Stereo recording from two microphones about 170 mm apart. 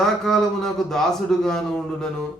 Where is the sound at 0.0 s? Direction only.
5° left (ahead or behind).